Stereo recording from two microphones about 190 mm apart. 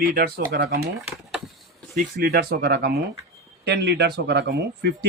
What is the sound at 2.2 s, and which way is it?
A man's voice, 55° right (ahead or behind).